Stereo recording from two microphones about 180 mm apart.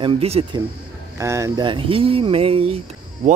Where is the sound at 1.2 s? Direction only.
15° right (ahead or behind).